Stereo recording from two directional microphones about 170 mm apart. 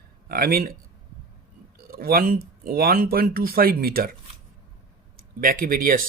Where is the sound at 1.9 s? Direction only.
60° right (ahead or behind).